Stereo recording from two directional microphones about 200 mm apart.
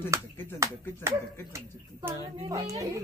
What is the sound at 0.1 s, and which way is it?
A child's voice, 15° right (ahead or behind).